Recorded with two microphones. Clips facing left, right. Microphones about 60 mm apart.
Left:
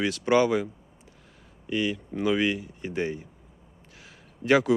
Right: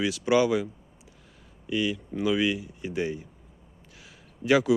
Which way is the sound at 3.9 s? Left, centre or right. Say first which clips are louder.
Left 1 dB; left.